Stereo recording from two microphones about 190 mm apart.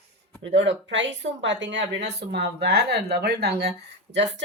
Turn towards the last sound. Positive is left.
turn(degrees=-70)  # may be behind; listen again after turning